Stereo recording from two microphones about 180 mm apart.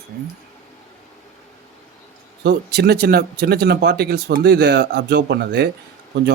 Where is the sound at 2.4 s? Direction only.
65° right (ahead or behind).